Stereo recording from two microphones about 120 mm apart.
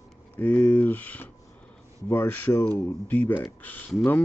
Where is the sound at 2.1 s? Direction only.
15° left (ahead or behind).